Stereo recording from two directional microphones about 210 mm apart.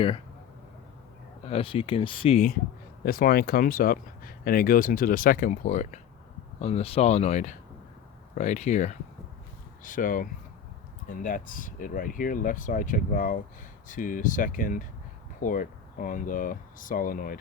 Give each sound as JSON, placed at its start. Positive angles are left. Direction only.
{"t": 1.5, "sound": "speech", "side_deg": 25}
{"t": 3.0, "sound": "speech", "side_deg": 45}